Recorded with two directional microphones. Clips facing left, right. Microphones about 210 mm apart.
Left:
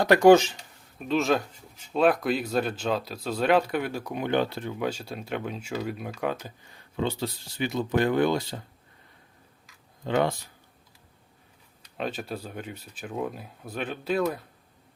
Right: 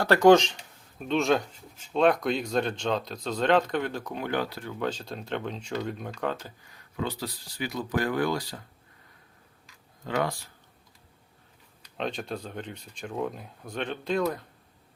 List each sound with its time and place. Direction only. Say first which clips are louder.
0.0 s speech: left 2 dB; 15° left (ahead or behind)
4.8 s speech: right 1 dB; 10° left (ahead or behind)
6.7 s speech: left 4 dB; 25° left (ahead or behind)
10.0 s speech: left 4 dB; 25° left (ahead or behind)
11.9 s speech: even; 5° left (ahead or behind)